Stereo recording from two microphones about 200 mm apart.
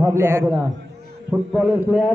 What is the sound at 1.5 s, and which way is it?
Speech, centre (ahead or behind).